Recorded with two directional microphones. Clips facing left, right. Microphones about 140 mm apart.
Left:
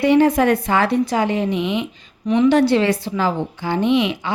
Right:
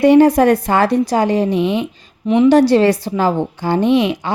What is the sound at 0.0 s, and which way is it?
A woman's voice, 45° right (ahead or behind).